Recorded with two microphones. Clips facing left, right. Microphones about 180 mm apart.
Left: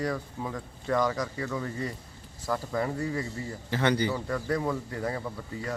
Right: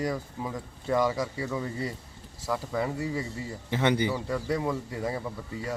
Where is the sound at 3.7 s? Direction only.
20° right (ahead or behind).